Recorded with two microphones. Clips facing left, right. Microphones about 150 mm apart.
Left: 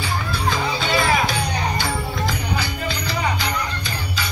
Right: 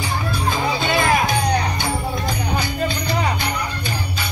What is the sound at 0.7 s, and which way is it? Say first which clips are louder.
Music: right 2 dB; 50° right (ahead or behind).